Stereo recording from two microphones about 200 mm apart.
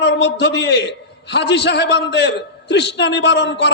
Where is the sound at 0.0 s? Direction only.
60° left (ahead or behind).